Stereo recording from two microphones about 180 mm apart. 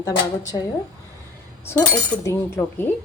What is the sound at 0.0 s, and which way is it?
Speech, 20° left (ahead or behind).